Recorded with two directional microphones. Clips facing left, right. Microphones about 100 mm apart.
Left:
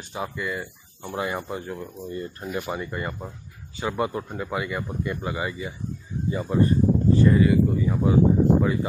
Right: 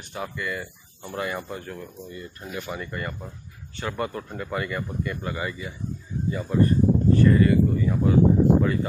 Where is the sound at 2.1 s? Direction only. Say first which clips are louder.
Left 6 dB; 35° left (ahead or behind).